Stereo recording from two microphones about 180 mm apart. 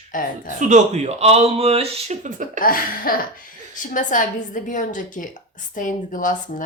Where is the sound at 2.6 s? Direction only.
50° left (ahead or behind).